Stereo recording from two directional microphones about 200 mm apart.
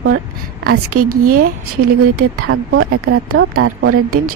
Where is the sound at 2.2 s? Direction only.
90° right.